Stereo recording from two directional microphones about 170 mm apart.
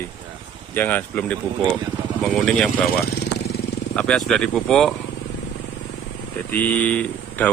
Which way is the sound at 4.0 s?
5° left (ahead or behind).